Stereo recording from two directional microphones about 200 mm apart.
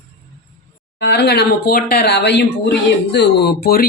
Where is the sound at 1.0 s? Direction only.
55° left (ahead or behind).